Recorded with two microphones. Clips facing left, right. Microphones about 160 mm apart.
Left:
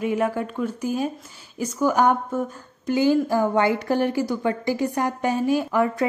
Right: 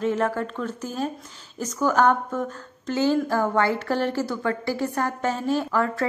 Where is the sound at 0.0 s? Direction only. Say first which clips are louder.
Left 1 dB; 10° left (ahead or behind).